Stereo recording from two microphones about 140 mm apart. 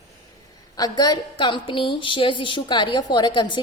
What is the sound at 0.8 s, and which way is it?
A woman's voice, 25° left (ahead or behind).